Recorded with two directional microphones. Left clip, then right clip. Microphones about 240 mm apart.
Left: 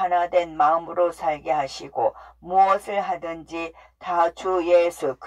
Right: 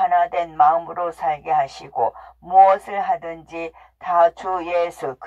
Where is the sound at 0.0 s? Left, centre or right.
Right.